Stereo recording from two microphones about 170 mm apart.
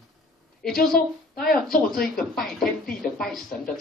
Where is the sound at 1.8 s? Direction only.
Centre (ahead or behind).